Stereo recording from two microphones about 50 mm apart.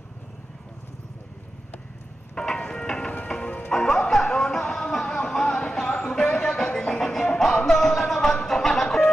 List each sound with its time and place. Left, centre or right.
2.3 s vehicle: centre
3.3 s music: left
3.7 s music: centre